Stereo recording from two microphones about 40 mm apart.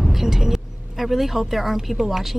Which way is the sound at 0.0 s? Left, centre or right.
Centre.